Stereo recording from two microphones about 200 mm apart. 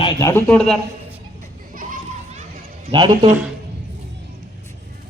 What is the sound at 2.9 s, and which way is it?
Speech, 20° right (ahead or behind).